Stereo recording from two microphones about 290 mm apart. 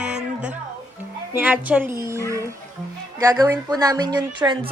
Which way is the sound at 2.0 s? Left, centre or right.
Centre.